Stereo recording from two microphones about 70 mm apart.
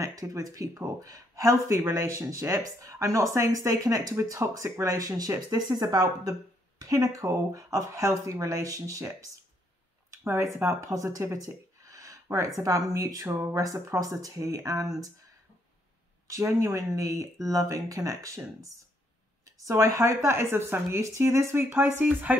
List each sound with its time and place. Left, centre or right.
0.0 s speech: right
5.5 s speech: right
6.8 s speech: right
10.5 s speech: right
10.9 s speech: right
11.4 s a sound: right
12.5 s speech: right
16.3 s speech: right
20.2 s speech: right